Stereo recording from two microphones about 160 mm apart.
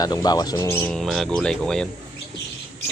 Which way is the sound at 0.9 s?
Centre (ahead or behind).